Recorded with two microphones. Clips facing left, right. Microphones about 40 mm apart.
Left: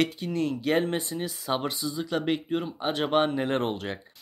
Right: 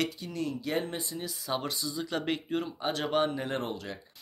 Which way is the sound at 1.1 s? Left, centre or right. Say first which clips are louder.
Left 5 dB; left.